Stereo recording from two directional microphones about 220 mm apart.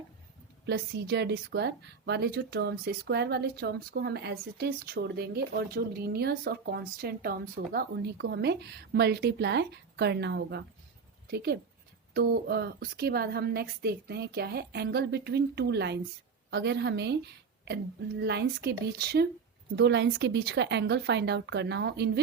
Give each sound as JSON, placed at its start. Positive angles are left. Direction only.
{"t": 0.6, "sound": "a woman's voice", "side_deg": -50}
{"t": 18.2, "sound": "a woman's voice", "side_deg": -50}